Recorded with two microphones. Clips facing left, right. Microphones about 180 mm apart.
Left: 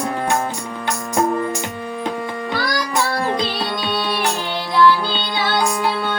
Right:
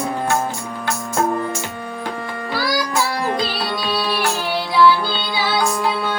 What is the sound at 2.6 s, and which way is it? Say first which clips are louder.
Music: right 2 dB; 5° right (ahead or behind).